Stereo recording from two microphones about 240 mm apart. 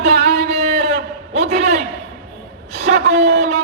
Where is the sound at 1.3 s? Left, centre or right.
Right.